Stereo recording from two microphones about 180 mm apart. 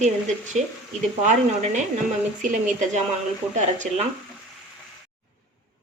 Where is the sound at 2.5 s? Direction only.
40° right (ahead or behind).